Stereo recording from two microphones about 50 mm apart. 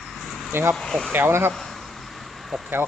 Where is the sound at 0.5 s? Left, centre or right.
Right.